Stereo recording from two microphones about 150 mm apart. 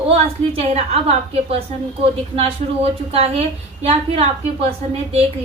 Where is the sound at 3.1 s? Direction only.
40° right (ahead or behind).